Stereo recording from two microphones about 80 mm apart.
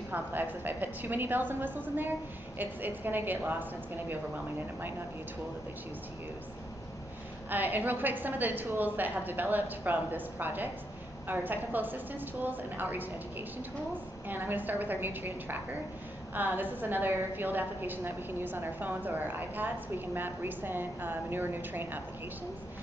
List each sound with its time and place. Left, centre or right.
0.1 s a woman's voice: right
7.4 s a woman's voice: right
14.2 s a woman's voice: right